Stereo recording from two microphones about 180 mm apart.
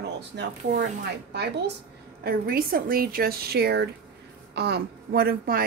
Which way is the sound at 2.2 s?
55° right (ahead or behind).